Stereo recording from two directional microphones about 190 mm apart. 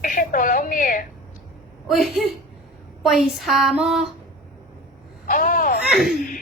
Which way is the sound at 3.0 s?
Centre (ahead or behind).